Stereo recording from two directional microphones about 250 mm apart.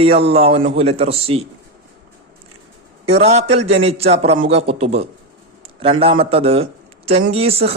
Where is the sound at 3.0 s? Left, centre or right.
Right.